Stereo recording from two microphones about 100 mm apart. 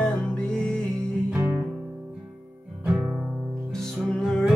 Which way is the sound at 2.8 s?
10° right (ahead or behind).